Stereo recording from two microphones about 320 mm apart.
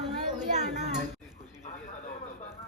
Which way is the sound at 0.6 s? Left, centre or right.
Right.